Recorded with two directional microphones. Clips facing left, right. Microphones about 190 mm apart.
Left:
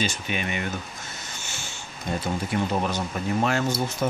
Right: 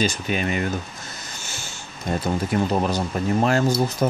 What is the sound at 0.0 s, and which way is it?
Speech, 40° right (ahead or behind).